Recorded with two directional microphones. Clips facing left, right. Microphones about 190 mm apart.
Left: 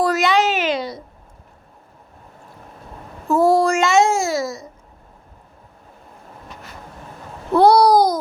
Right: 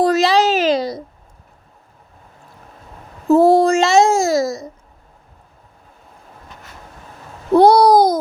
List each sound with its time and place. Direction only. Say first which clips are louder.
0.0 s a child's voice: right 3 dB; 25° right (ahead or behind)
3.3 s speech: right 4 dB; 25° right (ahead or behind)
3.8 s a child's voice: right 3 dB; 35° right (ahead or behind)
7.5 s babbling: right 3 dB; 20° right (ahead or behind)